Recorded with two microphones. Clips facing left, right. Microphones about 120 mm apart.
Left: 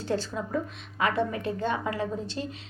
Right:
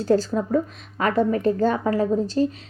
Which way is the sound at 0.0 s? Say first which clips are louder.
Right 10 dB; 40° right (ahead or behind).